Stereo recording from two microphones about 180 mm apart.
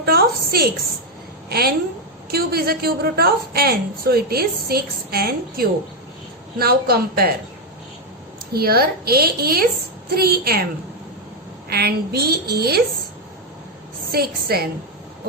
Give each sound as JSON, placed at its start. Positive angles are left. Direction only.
{"t": 0.0, "sound": "a sound", "side_deg": -60}
{"t": 1.5, "sound": "a woman's voice", "side_deg": -60}
{"t": 8.5, "sound": "a woman's voice", "side_deg": -60}
{"t": 11.7, "sound": "a woman's voice", "side_deg": -60}
{"t": 14.1, "sound": "a woman's voice", "side_deg": -60}